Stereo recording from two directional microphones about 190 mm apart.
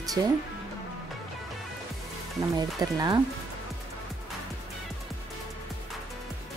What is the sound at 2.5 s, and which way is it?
Speech, 20° right (ahead or behind).